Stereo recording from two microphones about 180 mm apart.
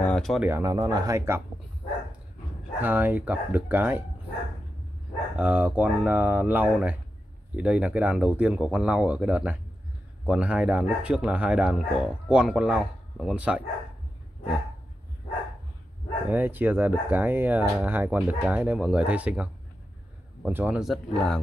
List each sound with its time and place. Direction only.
0.0 s a sound: 5° left (ahead or behind)
0.4 s speech: 15° right (ahead or behind)
2.8 s speech: 10° right (ahead or behind)
5.3 s speech: 5° right (ahead or behind)
16.3 s speech: 10° right (ahead or behind)